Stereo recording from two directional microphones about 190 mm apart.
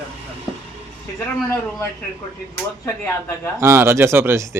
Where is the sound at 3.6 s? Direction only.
10° right (ahead or behind).